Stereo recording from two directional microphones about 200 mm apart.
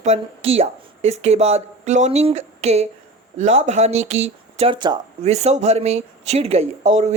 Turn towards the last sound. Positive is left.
turn(degrees=-35)  # may be behind; listen again after turning